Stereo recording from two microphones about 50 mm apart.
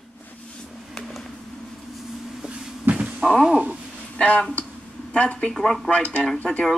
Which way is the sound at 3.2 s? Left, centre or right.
Centre.